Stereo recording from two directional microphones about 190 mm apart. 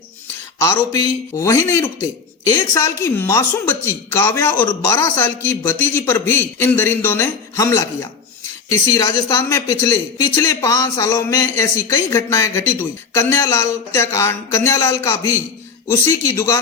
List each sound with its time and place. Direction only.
0.6 s speech: 15° left (ahead or behind)